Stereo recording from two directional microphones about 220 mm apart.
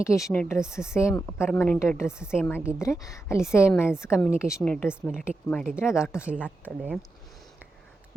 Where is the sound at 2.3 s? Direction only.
10° left (ahead or behind).